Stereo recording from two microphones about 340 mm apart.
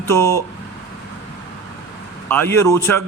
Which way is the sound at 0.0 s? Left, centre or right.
Centre.